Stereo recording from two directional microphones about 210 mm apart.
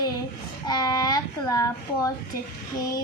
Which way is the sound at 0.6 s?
20° left (ahead or behind).